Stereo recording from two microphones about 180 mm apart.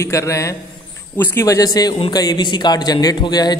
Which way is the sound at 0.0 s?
15° left (ahead or behind).